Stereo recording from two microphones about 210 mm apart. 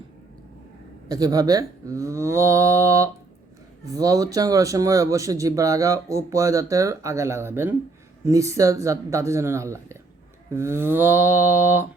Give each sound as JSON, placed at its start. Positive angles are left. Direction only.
{"t": 1.0, "sound": "speech", "side_deg": -15}